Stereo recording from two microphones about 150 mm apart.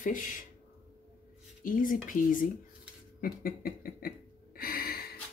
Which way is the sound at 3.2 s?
75° left (ahead or behind).